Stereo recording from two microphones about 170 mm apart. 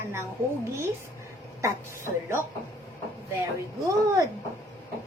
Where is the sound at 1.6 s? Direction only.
15° right (ahead or behind).